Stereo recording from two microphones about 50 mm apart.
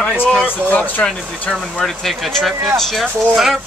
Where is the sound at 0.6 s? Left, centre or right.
Left.